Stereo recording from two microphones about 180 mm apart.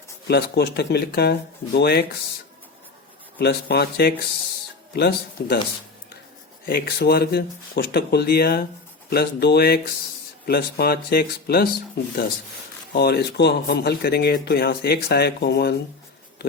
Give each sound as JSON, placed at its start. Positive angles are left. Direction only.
{"t": 0.3, "sound": "speech", "side_deg": 65}
{"t": 3.3, "sound": "speech", "side_deg": 65}
{"t": 6.7, "sound": "speech", "side_deg": 60}
{"t": 12.9, "sound": "speech", "side_deg": 60}